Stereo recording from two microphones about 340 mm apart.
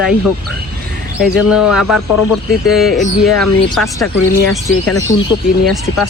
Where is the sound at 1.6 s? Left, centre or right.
Left.